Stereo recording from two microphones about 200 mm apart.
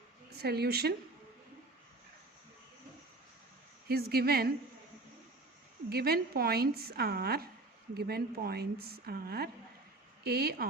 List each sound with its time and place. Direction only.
0.3 s a woman's voice: 55° right (ahead or behind)
3.8 s a woman's voice: 50° right (ahead or behind)
5.9 s a woman's voice: 50° right (ahead or behind)